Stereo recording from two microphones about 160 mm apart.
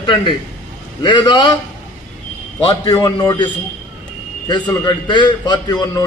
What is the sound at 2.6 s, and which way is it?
Speech, 30° left (ahead or behind).